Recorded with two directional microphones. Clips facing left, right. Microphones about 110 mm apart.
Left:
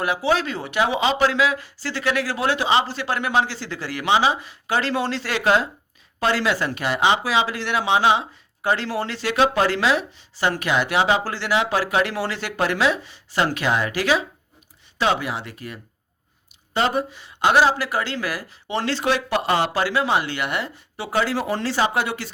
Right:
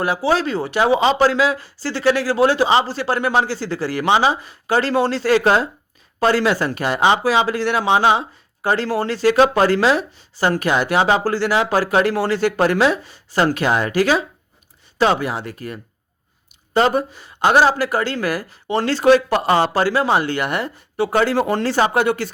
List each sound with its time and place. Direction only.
0.0 s speech: 35° right (ahead or behind); by 22.3 s 50° right (ahead or behind)